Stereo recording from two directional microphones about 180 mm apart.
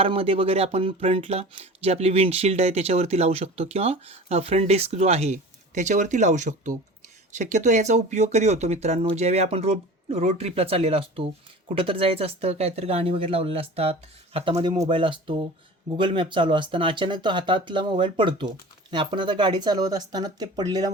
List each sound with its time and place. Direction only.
0.0 s speech: 30° right (ahead or behind)